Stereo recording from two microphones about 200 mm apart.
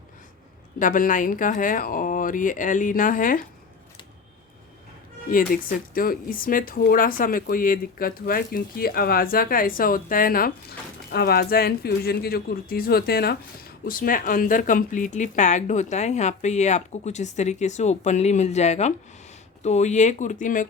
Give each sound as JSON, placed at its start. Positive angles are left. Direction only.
{"t": 0.8, "sound": "speech", "side_deg": 40}
{"t": 5.3, "sound": "speech", "side_deg": 45}